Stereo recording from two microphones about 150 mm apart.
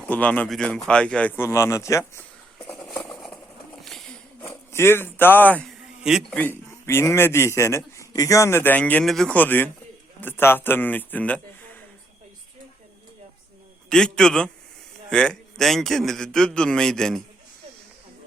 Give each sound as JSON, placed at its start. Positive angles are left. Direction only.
{"t": 0.0, "sound": "a man's voice", "side_deg": 10}
{"t": 3.8, "sound": "a sound", "side_deg": 5}
{"t": 6.0, "sound": "a man's voice", "side_deg": -5}
{"t": 6.3, "sound": "a man's voice", "side_deg": 10}
{"t": 13.9, "sound": "a man's voice", "side_deg": 5}